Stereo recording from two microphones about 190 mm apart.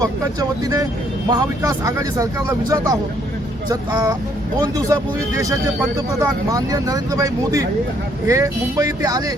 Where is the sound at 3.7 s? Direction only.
20° right (ahead or behind).